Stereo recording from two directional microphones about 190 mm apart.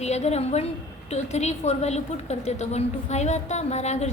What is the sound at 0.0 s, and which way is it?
A woman's voice, 35° left (ahead or behind).